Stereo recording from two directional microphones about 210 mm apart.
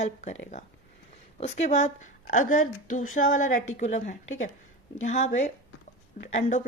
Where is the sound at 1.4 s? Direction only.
35° left (ahead or behind).